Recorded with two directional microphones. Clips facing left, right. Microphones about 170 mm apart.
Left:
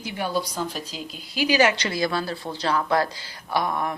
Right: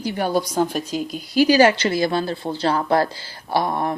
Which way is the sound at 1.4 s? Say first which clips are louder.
Right 5 dB; 35° right (ahead or behind).